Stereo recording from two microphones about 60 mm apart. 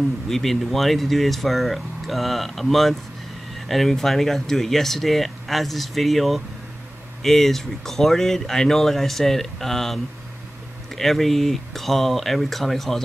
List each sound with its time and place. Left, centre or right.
0.3 s speech: centre
11.0 s speech: centre